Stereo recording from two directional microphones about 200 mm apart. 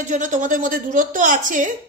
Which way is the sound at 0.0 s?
40° right (ahead or behind).